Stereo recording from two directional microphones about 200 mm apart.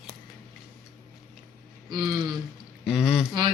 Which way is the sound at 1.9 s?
20° right (ahead or behind).